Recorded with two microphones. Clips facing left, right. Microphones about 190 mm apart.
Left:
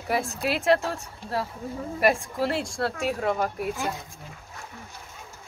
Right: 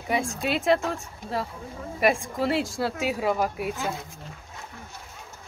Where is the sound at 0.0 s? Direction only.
Centre (ahead or behind).